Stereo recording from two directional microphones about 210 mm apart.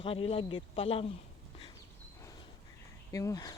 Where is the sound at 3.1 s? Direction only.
15° left (ahead or behind).